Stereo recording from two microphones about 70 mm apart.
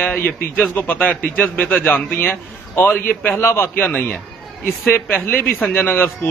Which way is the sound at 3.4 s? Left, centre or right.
Left.